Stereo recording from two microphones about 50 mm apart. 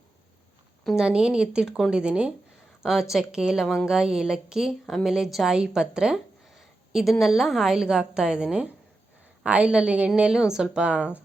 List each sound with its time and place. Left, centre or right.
0.9 s a woman's voice: centre
2.8 s a woman's voice: centre
6.9 s a woman's voice: centre; by 11.2 s right